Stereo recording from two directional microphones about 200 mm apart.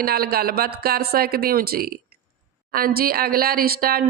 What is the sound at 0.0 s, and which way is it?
Speech, 50° right (ahead or behind).